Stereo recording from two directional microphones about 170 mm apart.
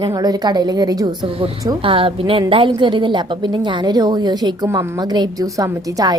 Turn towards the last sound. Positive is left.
turn(degrees=-20)  # may be behind; listen again after turning